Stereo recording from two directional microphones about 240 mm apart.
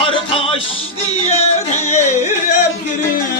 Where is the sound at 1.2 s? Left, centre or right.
Left.